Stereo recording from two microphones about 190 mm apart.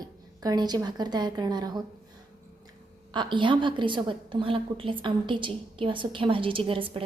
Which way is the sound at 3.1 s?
25° right (ahead or behind).